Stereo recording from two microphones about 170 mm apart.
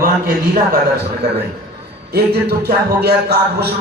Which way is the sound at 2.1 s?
65° right (ahead or behind).